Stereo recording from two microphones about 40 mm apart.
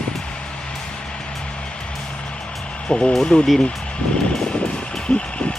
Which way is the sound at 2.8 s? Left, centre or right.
Left.